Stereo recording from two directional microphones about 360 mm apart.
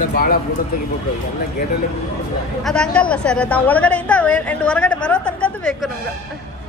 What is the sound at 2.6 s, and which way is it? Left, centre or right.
A woman's voice, centre.